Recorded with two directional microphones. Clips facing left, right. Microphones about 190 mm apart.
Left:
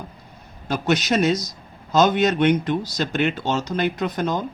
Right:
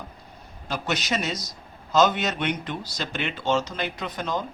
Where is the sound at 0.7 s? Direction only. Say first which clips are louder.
Left 7 dB; 50° left (ahead or behind).